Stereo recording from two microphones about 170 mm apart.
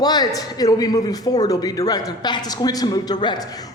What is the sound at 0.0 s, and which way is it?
A man's voice, 25° left (ahead or behind).